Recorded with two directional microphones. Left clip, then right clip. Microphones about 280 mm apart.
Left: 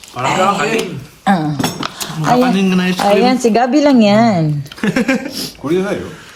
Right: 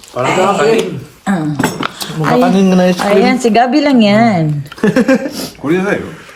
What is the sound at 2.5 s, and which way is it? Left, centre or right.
Speech, centre.